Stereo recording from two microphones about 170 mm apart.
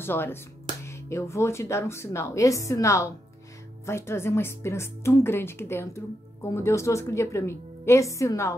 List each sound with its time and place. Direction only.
0.0 s a woman's voice: 15° left (ahead or behind)